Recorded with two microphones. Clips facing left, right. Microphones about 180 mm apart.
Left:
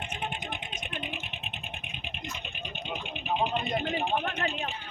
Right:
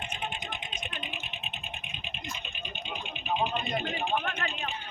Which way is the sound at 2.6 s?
65° left (ahead or behind).